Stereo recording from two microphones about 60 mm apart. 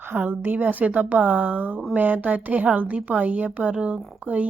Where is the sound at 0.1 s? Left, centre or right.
Right.